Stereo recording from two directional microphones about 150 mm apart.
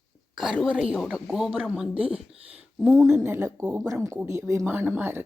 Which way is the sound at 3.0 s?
15° right (ahead or behind).